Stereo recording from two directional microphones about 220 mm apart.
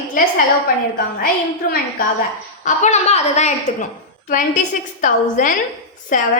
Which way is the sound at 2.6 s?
30° left (ahead or behind).